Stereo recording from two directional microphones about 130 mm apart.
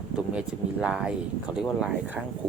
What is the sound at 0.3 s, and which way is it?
Speech, 5° right (ahead or behind).